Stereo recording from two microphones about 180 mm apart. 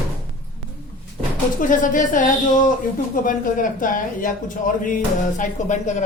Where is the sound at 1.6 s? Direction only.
45° left (ahead or behind).